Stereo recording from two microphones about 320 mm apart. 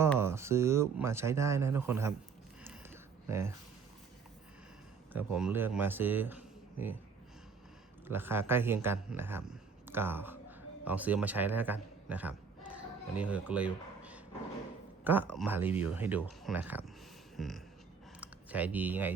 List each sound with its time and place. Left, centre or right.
0.2 s speech: centre
2.9 s a sound: centre
5.1 s speech: centre
8.0 s a man's voice: centre
17.3 s music: centre
18.2 s speech: centre